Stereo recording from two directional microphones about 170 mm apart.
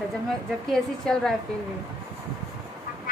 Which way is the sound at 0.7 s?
5° left (ahead or behind).